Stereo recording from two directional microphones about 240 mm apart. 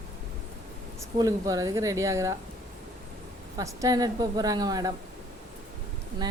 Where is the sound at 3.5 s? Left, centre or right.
Centre.